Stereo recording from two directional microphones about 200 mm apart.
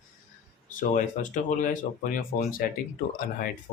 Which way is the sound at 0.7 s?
40° left (ahead or behind).